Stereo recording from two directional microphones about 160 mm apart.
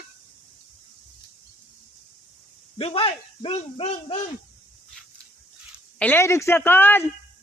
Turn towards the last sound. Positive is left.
turn(degrees=10)  # may be behind; listen again after turning